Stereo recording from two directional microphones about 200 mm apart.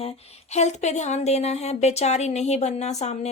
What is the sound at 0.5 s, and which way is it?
A woman's voice, 35° left (ahead or behind).